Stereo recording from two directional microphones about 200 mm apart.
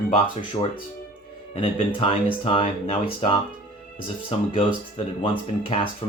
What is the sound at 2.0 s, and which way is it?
Speech, 30° left (ahead or behind).